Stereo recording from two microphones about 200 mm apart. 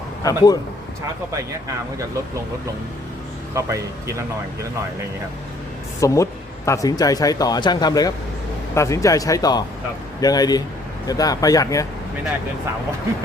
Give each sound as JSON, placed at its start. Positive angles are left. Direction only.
{"t": 0.2, "sound": "a man's voice", "side_deg": 20}
{"t": 1.3, "sound": "speech", "side_deg": -15}
{"t": 3.5, "sound": "speech", "side_deg": -15}
{"t": 6.0, "sound": "speech", "side_deg": 15}